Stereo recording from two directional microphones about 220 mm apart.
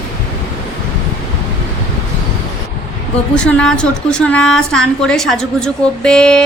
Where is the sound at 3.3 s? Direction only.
5° left (ahead or behind).